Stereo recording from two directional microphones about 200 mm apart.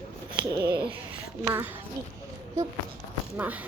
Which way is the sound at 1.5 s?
10° right (ahead or behind).